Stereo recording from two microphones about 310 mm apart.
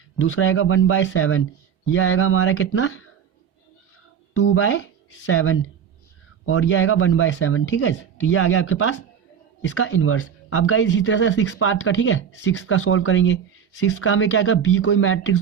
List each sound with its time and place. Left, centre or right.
0.2 s speech: left
4.4 s speech: left